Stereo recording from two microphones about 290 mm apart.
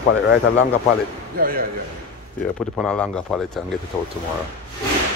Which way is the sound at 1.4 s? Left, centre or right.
Right.